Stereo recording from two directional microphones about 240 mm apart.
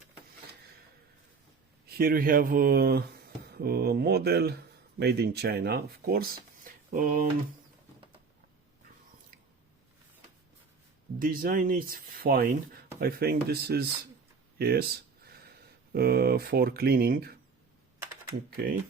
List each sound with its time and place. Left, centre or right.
1.9 s speech: right
11.2 s speech: right
14.6 s a sound: right
15.9 s speech: right